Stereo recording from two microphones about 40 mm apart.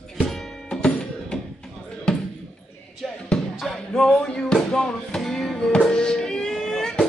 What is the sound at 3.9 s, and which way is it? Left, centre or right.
Music, centre.